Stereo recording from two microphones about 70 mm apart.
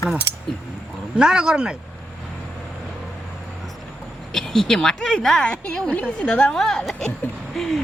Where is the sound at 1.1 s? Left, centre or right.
Centre.